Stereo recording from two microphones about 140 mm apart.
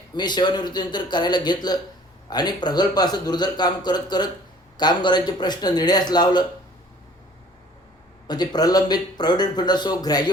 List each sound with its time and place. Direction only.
0.2 s speech: 30° left (ahead or behind)
8.3 s speech: 30° left (ahead or behind)